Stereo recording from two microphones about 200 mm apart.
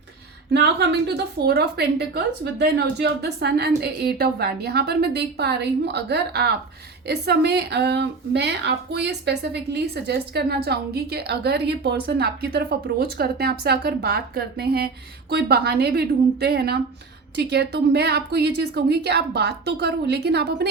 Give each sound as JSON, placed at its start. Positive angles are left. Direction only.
{"t": 0.5, "sound": "a woman's voice", "side_deg": -55}